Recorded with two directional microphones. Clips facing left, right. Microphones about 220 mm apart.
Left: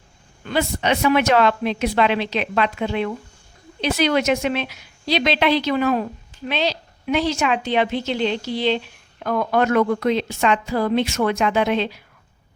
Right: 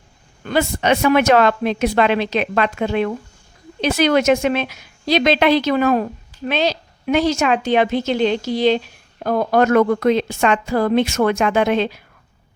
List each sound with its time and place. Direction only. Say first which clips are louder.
0.4 s a woman's voice: right 3 dB; 50° right (ahead or behind)